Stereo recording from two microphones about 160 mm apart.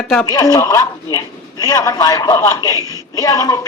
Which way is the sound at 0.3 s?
20° left (ahead or behind).